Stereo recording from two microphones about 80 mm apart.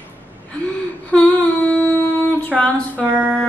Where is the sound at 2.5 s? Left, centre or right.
Centre.